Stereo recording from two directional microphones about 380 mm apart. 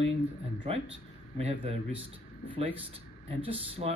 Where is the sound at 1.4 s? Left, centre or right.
Centre.